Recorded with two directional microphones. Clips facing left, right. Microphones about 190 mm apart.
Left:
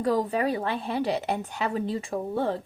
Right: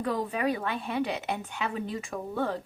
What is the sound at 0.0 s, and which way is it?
A woman's voice, 35° left (ahead or behind).